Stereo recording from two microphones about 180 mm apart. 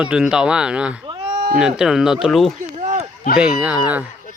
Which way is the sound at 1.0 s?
25° right (ahead or behind).